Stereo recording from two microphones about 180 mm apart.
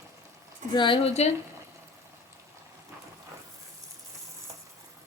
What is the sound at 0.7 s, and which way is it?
Speech, 25° left (ahead or behind).